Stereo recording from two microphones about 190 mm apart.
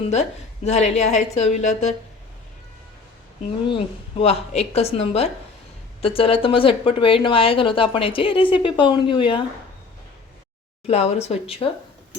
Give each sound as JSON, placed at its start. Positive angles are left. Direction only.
{"t": 0.1, "sound": "a woman's voice", "side_deg": 35}
{"t": 4.2, "sound": "a woman's voice", "side_deg": 30}
{"t": 10.8, "sound": "a woman's voice", "side_deg": 35}